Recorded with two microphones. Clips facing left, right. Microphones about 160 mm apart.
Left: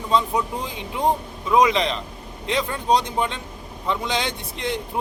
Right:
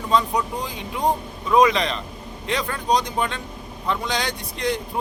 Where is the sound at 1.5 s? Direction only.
20° left (ahead or behind).